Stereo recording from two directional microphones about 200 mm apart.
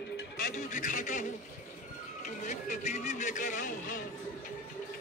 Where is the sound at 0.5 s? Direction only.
40° left (ahead or behind).